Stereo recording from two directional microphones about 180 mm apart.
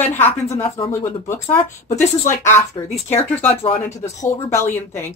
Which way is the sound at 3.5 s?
35° left (ahead or behind).